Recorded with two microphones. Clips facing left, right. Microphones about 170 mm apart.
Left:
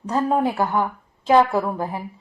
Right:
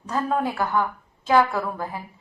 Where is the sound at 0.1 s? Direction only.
20° left (ahead or behind).